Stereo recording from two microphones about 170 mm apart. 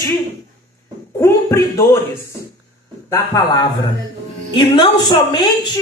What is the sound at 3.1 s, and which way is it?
Speech, 25° left (ahead or behind).